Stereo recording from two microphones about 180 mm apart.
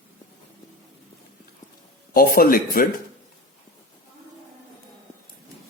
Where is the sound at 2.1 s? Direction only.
55° left (ahead or behind).